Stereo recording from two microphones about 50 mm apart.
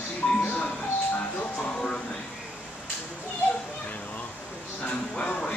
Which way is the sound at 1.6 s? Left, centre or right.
Centre.